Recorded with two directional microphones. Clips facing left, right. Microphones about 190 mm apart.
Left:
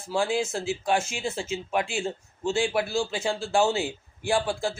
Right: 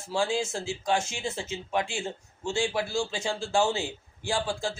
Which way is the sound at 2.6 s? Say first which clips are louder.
Left 2 dB; 20° left (ahead or behind).